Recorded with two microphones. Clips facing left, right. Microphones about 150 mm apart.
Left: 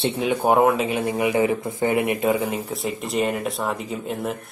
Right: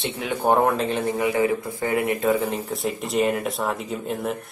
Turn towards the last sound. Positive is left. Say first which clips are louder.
# even
turn(degrees=0)  # may be behind; listen again after turning